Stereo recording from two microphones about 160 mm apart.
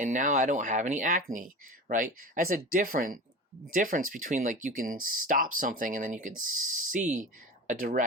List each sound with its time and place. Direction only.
0.0 s speech: 50° right (ahead or behind)